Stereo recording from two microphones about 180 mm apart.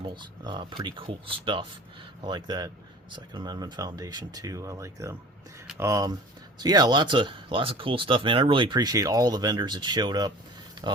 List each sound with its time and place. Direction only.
0.0 s speech: 25° right (ahead or behind)